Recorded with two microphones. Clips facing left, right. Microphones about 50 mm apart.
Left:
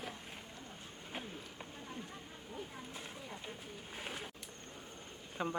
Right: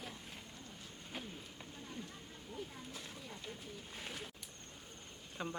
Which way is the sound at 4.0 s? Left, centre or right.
Centre.